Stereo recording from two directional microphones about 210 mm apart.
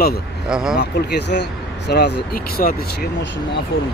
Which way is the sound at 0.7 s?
55° left (ahead or behind).